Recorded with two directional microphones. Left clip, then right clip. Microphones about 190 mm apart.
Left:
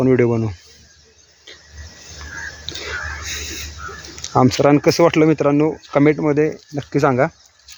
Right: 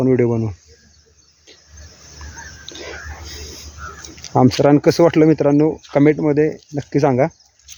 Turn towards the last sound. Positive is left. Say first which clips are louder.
# right 1 dB
turn(degrees=-20)  # may be behind; listen again after turning